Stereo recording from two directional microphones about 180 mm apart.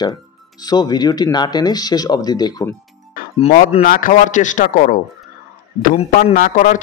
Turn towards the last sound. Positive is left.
turn(degrees=45)  # may be behind; listen again after turning